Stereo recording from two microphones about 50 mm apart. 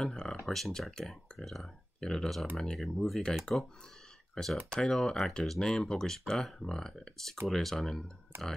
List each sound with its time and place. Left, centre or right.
0.0 s a sound: centre
0.5 s speech: centre
2.0 s speech: centre
3.5 s speech: centre
8.3 s speech: right